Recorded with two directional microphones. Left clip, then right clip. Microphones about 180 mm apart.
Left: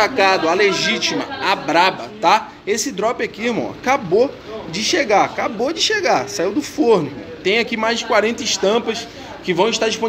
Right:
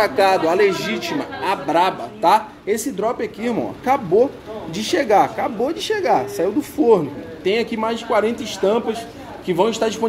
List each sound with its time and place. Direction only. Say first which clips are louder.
0.0 s a man's voice: left 1 dB; 10° right (ahead or behind)
5.3 s a man's voice: left 1 dB; 10° right (ahead or behind)